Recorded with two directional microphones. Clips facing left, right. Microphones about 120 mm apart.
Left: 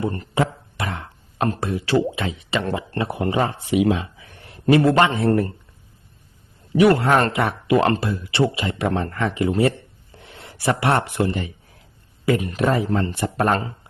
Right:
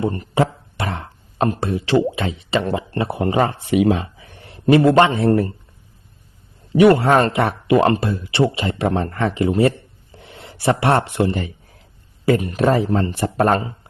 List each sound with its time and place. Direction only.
0.0 s a sound: 25° right (ahead or behind)
1.6 s a man's voice: 25° right (ahead or behind)
3.3 s speech: 55° right (ahead or behind)
4.9 s speech: 25° right (ahead or behind)
6.7 s speech: 30° right (ahead or behind)
7.8 s a man's voice: 20° right (ahead or behind); by 13.6 s 35° right (ahead or behind)